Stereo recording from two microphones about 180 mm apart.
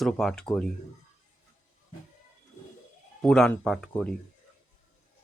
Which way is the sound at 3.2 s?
5° left (ahead or behind).